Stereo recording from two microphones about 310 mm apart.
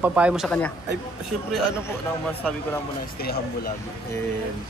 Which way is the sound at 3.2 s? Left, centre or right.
Left.